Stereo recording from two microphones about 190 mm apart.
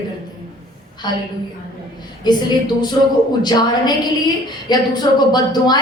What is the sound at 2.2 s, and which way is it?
Speech, 20° left (ahead or behind).